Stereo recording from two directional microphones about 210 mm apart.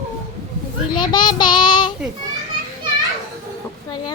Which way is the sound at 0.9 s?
20° left (ahead or behind).